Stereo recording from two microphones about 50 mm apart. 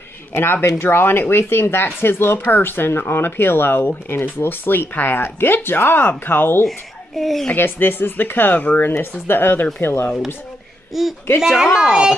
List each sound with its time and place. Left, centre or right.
0.3 s speech: left
7.2 s a woman's voice: centre
7.5 s speech: left
8.9 s speech: left
10.9 s speech: centre